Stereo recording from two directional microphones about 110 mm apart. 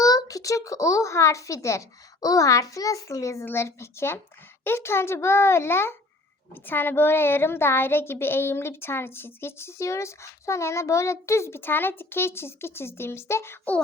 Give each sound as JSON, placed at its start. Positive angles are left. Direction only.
{"t": 0.0, "sound": "a child's voice", "side_deg": 35}